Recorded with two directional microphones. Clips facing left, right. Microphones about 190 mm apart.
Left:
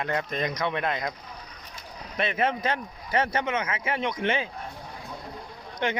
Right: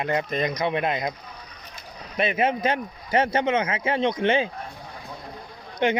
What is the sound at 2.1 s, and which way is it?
Speech, 10° right (ahead or behind).